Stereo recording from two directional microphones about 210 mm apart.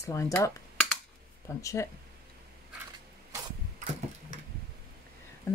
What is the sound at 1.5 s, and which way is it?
Speech, 15° left (ahead or behind).